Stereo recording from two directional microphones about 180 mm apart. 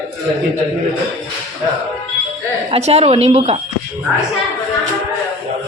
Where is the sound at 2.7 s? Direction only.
35° right (ahead or behind).